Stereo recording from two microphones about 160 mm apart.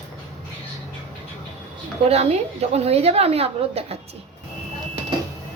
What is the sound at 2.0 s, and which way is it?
A woman's voice, 40° right (ahead or behind).